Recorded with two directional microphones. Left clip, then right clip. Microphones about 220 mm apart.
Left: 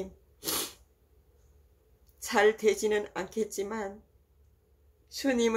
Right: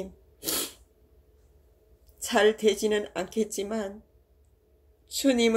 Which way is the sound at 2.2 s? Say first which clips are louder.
Right 2 dB; 5° right (ahead or behind).